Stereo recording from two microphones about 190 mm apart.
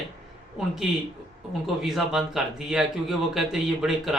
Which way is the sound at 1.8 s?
Centre (ahead or behind).